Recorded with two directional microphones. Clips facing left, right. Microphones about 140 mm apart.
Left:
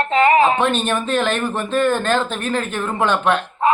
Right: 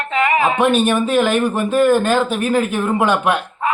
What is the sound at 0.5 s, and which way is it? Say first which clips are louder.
Speech: right 4 dB; 10° right (ahead or behind).